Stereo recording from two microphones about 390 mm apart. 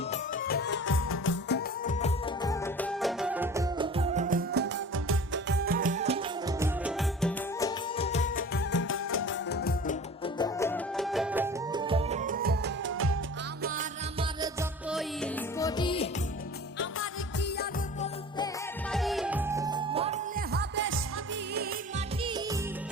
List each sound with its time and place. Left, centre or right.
0.1 s music: left; by 6.7 s centre
6.8 s music: centre
7.9 s music: centre; by 14.3 s right
14.4 s music: centre
16.7 s music: left
18.9 s music: centre